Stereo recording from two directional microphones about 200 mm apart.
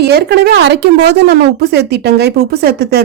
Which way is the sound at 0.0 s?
55° right (ahead or behind).